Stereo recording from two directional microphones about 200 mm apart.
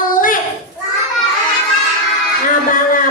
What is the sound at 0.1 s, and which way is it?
Children playing, 40° left (ahead or behind).